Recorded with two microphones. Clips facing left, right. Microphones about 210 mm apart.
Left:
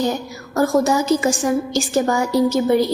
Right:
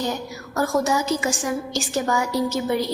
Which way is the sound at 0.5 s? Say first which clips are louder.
Left 5 dB; 40° left (ahead or behind).